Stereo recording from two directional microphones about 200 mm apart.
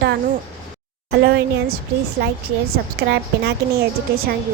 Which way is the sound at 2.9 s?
55° right (ahead or behind).